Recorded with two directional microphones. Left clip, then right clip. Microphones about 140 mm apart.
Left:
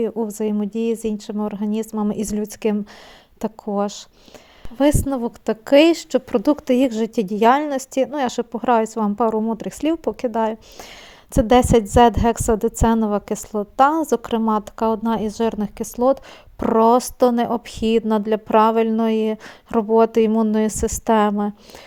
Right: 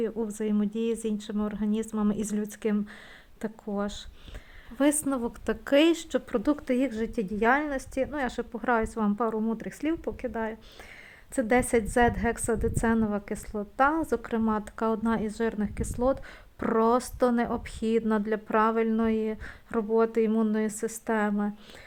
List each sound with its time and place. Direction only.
0.3 s speech: 30° left (ahead or behind)